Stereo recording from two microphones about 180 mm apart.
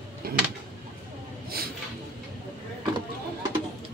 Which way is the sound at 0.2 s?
55° right (ahead or behind).